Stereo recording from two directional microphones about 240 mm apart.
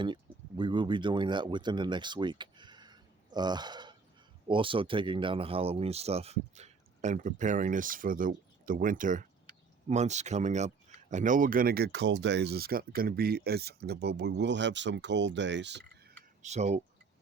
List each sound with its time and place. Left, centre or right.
0.0 s speech: centre; by 15.8 s right
16.4 s speech: right